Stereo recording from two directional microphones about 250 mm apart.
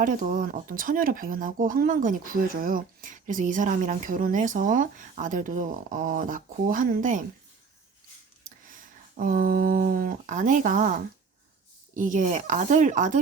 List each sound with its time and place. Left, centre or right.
0.0 s speech: right
8.4 s a sound: right
11.9 s speech: right